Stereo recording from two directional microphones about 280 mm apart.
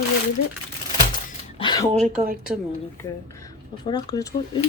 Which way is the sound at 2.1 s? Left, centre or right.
Right.